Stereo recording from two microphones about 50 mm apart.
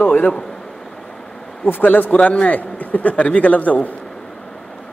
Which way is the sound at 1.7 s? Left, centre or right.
Left.